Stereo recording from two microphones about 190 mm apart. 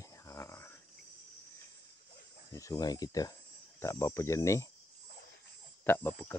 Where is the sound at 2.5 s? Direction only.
15° left (ahead or behind).